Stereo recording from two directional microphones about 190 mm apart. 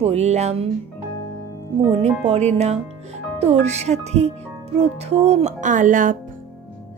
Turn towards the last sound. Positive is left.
turn(degrees=-45)  # may be behind; listen again after turning